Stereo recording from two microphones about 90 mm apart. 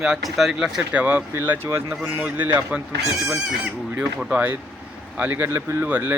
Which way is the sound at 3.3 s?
5° right (ahead or behind).